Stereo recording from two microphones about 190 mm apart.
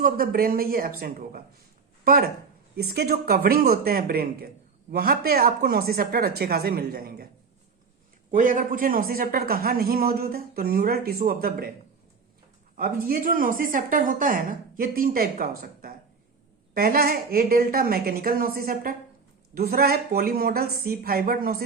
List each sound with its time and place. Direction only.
0.0 s a woman's voice: 50° right (ahead or behind)
8.3 s a woman's voice: 45° right (ahead or behind)
12.7 s a woman's voice: 50° right (ahead or behind)